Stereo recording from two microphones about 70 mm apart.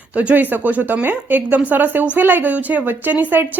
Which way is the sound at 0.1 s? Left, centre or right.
Right.